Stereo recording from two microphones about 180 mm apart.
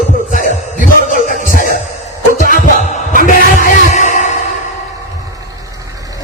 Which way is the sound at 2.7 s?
45° left (ahead or behind).